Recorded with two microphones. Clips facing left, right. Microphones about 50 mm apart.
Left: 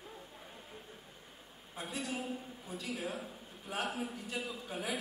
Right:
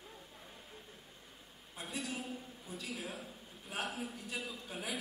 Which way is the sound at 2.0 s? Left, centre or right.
Centre.